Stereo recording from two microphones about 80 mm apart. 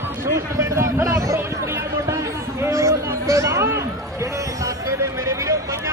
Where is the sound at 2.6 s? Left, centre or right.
Right.